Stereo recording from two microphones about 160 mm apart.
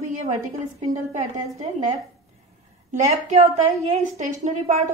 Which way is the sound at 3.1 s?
45° right (ahead or behind).